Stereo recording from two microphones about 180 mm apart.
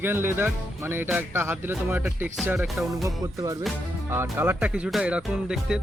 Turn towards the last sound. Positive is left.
turn(degrees=-5)  # may be behind; listen again after turning